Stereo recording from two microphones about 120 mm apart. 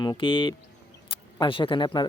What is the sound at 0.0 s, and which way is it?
Speech, 40° left (ahead or behind).